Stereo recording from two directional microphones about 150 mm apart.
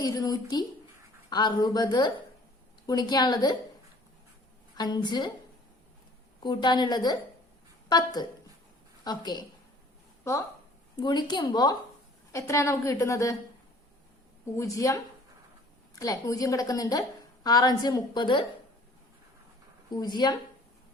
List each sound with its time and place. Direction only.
0.0 s a sound: 25° left (ahead or behind)
1.3 s a woman's voice: 30° left (ahead or behind)
4.8 s a woman's voice: 30° left (ahead or behind)
6.4 s a woman's voice: 30° left (ahead or behind)
11.0 s a woman's voice: 30° left (ahead or behind)
14.6 s a woman's voice: 20° left (ahead or behind)
19.9 s a woman's voice: 25° left (ahead or behind)